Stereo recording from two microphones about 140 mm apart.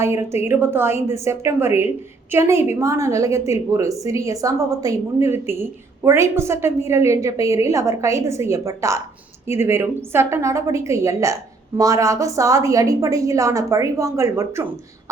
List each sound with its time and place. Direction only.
0.0 s a woman's voice: 20° right (ahead or behind)